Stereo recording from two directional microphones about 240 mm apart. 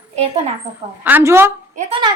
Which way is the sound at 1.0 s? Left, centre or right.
Centre.